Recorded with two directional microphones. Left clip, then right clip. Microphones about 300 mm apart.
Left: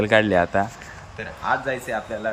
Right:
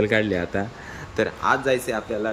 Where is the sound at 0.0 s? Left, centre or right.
Centre.